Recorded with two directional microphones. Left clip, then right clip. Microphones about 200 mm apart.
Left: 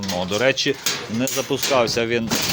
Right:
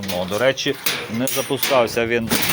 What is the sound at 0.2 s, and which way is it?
Speech, 25° left (ahead or behind).